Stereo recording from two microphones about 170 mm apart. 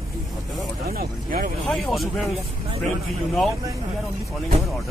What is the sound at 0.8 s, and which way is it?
Speech, 65° right (ahead or behind).